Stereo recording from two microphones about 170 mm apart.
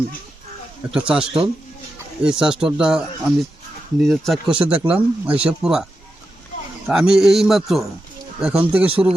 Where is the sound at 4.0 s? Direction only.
Centre (ahead or behind).